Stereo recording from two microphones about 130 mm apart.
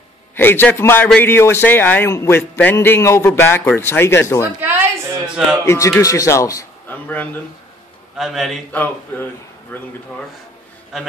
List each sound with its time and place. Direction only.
0.4 s a man's voice: 15° left (ahead or behind)
4.6 s a sound: 15° right (ahead or behind)
5.7 s speech: 20° left (ahead or behind)
6.9 s speech: 10° left (ahead or behind)
8.2 s a man's voice: centre (ahead or behind)
8.7 s a man's voice: 15° left (ahead or behind)